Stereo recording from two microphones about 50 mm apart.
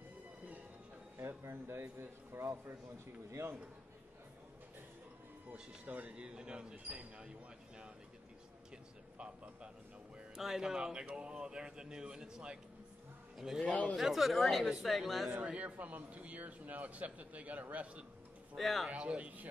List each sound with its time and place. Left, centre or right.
1.1 s a man's voice: right
5.9 s speech: right
9.2 s a man's voice: right
10.1 s speech: centre
13.4 s speech: centre
15.4 s a man's voice: right
18.6 s speech: centre
18.9 s speech: right